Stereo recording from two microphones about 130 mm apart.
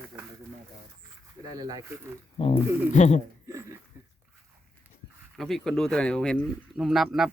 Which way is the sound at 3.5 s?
20° right (ahead or behind).